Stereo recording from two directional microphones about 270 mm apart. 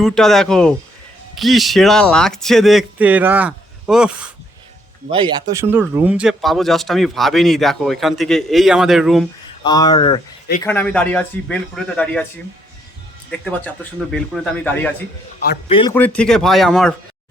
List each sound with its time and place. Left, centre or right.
0.0 s speech: centre
5.1 s speech: centre
9.6 s speech: centre
14.1 s speech: centre
15.7 s speech: centre
16.0 s speech: centre